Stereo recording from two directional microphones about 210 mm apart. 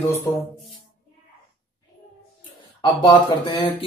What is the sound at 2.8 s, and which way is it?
Speech, 20° left (ahead or behind).